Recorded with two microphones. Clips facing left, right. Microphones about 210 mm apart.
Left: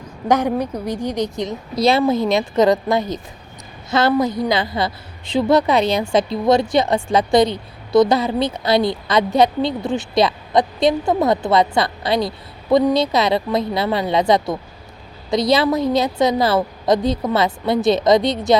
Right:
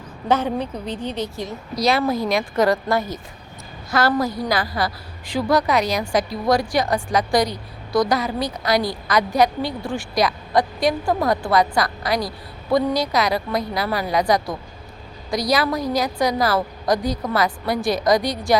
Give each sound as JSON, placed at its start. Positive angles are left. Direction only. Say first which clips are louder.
{"t": 0.3, "sound": "a woman's voice", "louder": "left 3 dB", "side_deg": 15}